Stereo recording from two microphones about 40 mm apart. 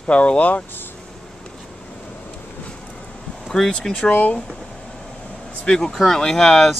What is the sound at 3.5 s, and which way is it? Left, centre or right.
Speech, centre.